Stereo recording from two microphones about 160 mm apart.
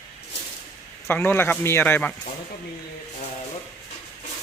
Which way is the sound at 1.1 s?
10° left (ahead or behind).